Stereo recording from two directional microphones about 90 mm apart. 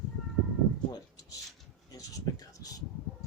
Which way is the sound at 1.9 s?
45° left (ahead or behind).